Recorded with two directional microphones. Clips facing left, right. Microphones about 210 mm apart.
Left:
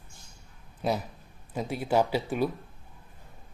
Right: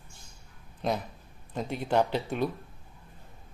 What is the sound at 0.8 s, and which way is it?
Speech, 5° left (ahead or behind).